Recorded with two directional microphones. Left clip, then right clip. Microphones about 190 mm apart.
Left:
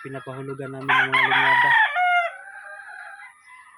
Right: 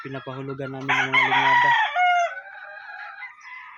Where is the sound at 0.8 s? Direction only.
5° left (ahead or behind).